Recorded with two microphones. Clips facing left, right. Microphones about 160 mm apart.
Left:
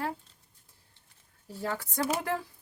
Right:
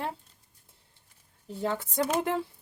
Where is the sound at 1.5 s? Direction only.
20° right (ahead or behind).